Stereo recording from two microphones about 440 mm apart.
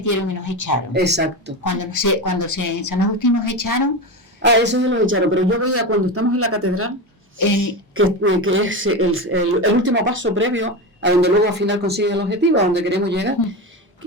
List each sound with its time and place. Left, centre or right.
0.0 s a woman's voice: left
0.9 s speech: right
1.6 s speech: left
4.4 s speech: right
7.3 s speech: left
7.9 s speech: right